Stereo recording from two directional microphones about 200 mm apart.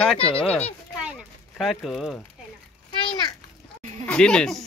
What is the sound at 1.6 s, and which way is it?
Speech, centre (ahead or behind).